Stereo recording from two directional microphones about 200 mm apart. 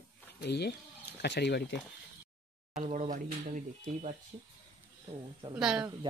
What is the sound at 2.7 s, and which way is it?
Speech, 40° right (ahead or behind).